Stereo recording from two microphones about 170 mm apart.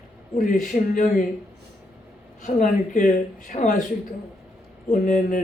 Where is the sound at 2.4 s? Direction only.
50° left (ahead or behind).